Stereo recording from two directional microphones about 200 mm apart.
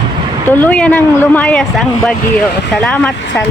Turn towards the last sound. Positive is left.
turn(degrees=5)  # may be behind; listen again after turning